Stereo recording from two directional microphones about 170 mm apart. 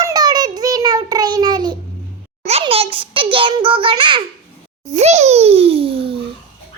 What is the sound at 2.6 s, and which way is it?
A child's voice, 35° right (ahead or behind).